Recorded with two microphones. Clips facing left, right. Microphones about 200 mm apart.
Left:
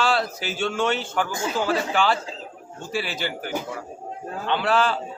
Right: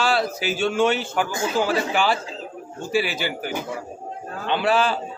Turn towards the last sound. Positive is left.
turn(degrees=-10)  # may be behind; listen again after turning